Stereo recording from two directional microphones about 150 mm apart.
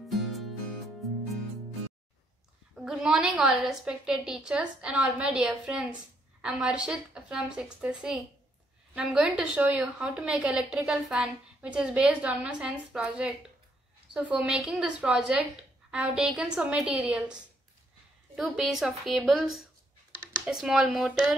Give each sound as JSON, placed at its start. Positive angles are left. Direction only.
{"t": 0.1, "sound": "music", "side_deg": 0}
{"t": 2.7, "sound": "a woman's voice", "side_deg": -5}